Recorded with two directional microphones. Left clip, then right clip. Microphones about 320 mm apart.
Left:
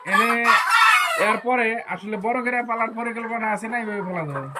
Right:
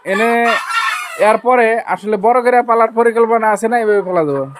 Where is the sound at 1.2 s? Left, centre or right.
Centre.